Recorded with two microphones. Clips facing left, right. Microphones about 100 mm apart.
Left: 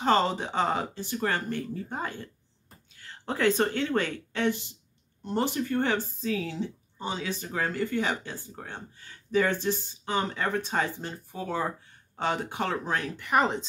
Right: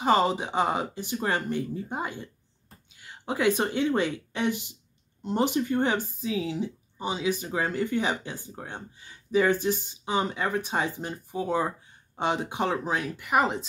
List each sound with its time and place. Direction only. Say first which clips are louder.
0.0 s speech: right 1 dB; 10° right (ahead or behind)